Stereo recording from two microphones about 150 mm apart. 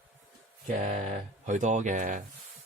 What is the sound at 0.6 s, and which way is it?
Speech, 50° right (ahead or behind).